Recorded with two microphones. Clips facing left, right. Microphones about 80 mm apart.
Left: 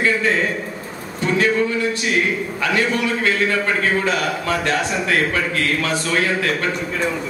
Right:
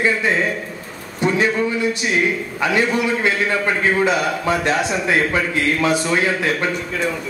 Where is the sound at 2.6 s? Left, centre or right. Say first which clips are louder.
Right 2 dB; centre.